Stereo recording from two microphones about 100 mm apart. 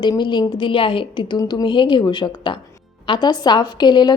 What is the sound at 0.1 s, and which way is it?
A woman's voice, 50° left (ahead or behind).